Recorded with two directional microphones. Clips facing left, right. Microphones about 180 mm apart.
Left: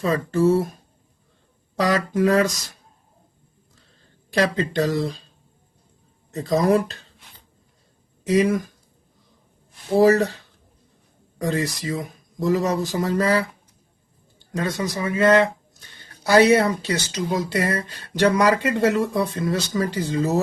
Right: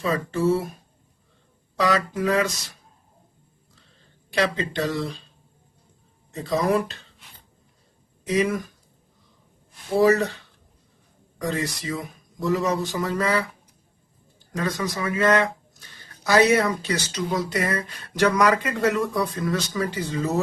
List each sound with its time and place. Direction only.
0.0 s speech: 40° left (ahead or behind)
1.8 s speech: 40° left (ahead or behind)
4.3 s speech: 40° left (ahead or behind)
6.3 s speech: 40° left (ahead or behind)
8.3 s speech: 40° left (ahead or behind)
10.0 s speech: 35° left (ahead or behind)
11.4 s speech: 35° left (ahead or behind)
14.5 s speech: 30° left (ahead or behind)